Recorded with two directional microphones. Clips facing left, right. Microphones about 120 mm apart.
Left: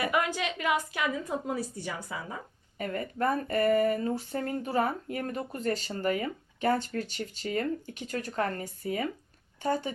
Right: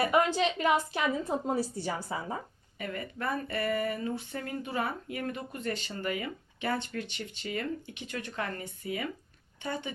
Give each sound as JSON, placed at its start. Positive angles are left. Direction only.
{"t": 0.0, "sound": "a woman's voice", "side_deg": -30}
{"t": 2.7, "sound": "speech", "side_deg": 40}